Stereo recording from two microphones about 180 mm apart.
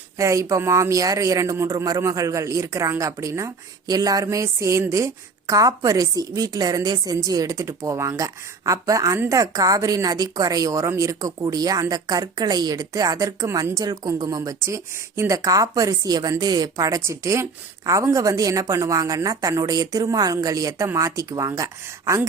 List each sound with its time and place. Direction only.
0.2 s speech: 15° right (ahead or behind)